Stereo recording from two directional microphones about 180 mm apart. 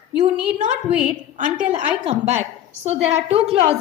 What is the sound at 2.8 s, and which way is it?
Speech, 35° right (ahead or behind).